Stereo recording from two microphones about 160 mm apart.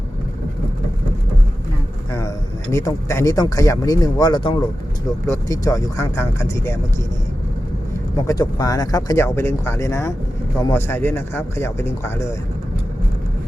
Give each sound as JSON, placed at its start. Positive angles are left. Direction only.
{"t": 2.7, "sound": "speech", "side_deg": 15}
{"t": 8.1, "sound": "speech", "side_deg": 25}